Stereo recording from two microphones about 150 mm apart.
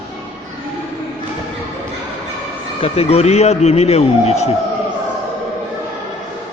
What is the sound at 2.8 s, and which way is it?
A man's voice, 40° left (ahead or behind).